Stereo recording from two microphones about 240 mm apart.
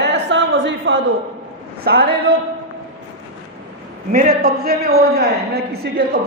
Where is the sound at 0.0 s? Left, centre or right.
Right.